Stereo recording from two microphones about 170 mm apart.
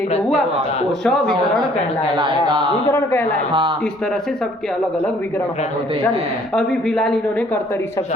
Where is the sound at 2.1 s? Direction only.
30° right (ahead or behind).